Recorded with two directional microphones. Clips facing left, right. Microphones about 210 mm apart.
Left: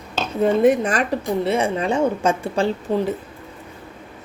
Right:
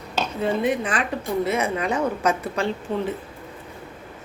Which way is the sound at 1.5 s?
30° left (ahead or behind).